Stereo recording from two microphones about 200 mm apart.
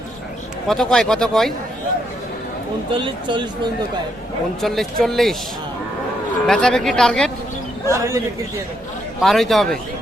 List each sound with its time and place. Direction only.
0.7 s speech: 5° left (ahead or behind)
2.9 s speech: 25° right (ahead or behind)
4.6 s speech: centre (ahead or behind)
6.5 s speech: 5° left (ahead or behind)
7.9 s a man's voice: 15° right (ahead or behind)
9.2 s speech: centre (ahead or behind)